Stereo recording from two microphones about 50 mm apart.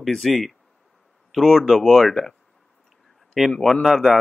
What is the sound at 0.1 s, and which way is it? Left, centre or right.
Speech, centre.